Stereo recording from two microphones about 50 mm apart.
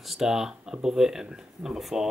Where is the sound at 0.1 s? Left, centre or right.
Centre.